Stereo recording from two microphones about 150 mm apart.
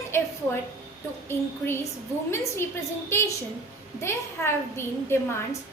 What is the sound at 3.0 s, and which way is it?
A woman's voice, 20° left (ahead or behind).